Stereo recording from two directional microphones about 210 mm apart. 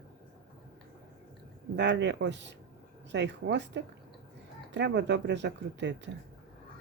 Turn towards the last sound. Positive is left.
turn(degrees=-55)  # may be behind; listen again after turning